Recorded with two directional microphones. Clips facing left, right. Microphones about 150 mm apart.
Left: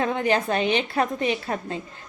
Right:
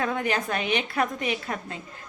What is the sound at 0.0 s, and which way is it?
A woman's voice, 25° left (ahead or behind).